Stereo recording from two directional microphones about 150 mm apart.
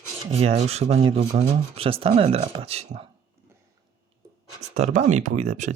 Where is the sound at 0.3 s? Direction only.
45° right (ahead or behind).